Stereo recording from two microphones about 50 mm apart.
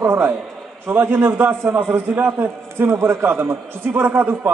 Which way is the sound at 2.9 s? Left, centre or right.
Right.